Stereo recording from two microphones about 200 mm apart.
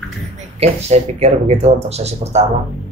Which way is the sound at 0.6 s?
30° right (ahead or behind).